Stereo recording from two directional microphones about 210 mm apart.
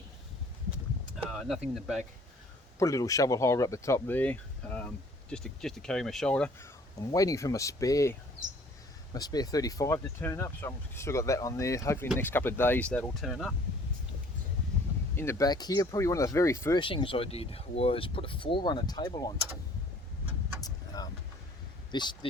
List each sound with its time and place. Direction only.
1.3 s speech: centre (ahead or behind)
2.7 s speech: 15° left (ahead or behind)
7.0 s speech: 15° left (ahead or behind)
9.1 s speech: 20° left (ahead or behind); by 13.5 s centre (ahead or behind)
15.1 s speech: 10° left (ahead or behind)
16.8 s speech: 25° left (ahead or behind)
20.6 s vehicle: 20° left (ahead or behind)
21.9 s speech: 20° left (ahead or behind)